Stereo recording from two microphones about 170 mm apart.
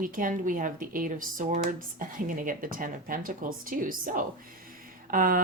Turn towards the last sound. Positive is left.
turn(degrees=-55)  # may be behind; listen again after turning